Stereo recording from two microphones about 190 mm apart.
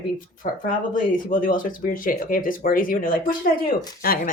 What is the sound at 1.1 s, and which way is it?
Speech, 45° left (ahead or behind).